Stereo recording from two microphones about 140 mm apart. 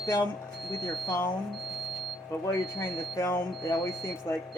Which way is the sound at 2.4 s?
25° left (ahead or behind).